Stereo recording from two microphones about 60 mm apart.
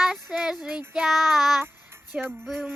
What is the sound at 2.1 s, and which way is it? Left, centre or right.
Music, right.